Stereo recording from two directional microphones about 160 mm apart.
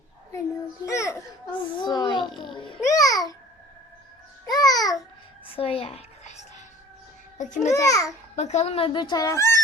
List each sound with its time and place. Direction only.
0.9 s a sound: 20° left (ahead or behind)
2.8 s babbling: 20° left (ahead or behind)
4.4 s babbling: 25° left (ahead or behind)
5.5 s a sound: 35° left (ahead or behind)
7.3 s a child's voice: 50° left (ahead or behind)
7.7 s a child's voice: 20° left (ahead or behind)
8.4 s speech: 45° left (ahead or behind); by 9.6 s 20° left (ahead or behind)